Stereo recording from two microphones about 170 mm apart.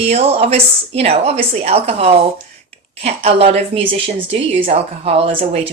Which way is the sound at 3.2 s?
35° right (ahead or behind).